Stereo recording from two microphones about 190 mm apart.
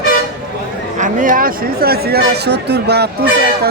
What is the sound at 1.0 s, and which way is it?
Speech, 45° right (ahead or behind).